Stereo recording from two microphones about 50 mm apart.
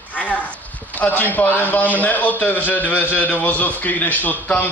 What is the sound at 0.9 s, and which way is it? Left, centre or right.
A man's voice, left.